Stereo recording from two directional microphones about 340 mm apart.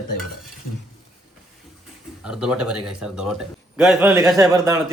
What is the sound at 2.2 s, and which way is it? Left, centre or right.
A man's voice, centre.